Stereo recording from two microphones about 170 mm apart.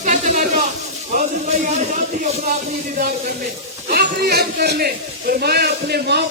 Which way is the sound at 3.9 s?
70° right (ahead or behind).